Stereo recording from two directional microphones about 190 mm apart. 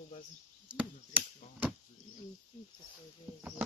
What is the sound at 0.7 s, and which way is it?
Speech, 5° right (ahead or behind).